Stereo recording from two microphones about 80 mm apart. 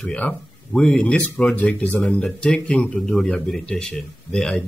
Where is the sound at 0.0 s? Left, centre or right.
Centre.